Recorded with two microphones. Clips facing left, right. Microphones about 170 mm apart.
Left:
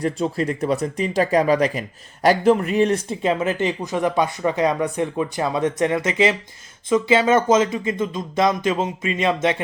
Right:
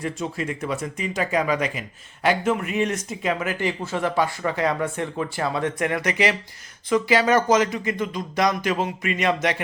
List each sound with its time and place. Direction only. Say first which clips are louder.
0.0 s speech: left 6 dB; 35° left (ahead or behind)